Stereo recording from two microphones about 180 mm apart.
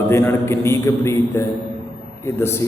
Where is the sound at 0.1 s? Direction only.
15° left (ahead or behind).